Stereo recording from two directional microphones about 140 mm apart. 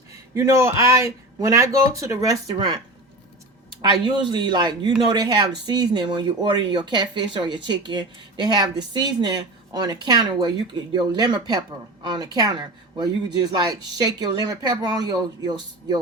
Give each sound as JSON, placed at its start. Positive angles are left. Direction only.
{"t": 0.1, "sound": "a man's voice", "side_deg": -25}